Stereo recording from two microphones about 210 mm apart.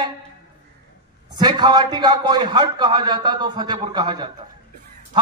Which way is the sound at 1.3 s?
20° right (ahead or behind).